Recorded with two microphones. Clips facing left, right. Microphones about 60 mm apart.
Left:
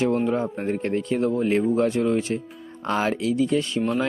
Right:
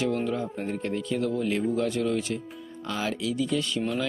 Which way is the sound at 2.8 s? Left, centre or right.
Left.